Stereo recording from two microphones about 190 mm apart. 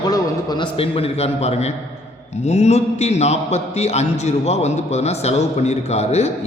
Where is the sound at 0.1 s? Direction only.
25° left (ahead or behind).